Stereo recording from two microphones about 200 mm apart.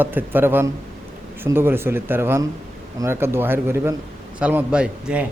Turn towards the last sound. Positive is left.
turn(degrees=-5)  # may be behind; listen again after turning